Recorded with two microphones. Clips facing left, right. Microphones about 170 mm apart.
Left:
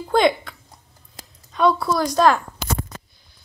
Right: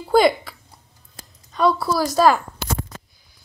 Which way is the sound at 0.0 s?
5° right (ahead or behind).